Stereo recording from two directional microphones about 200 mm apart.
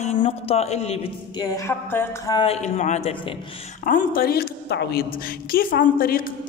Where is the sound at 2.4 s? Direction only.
30° left (ahead or behind).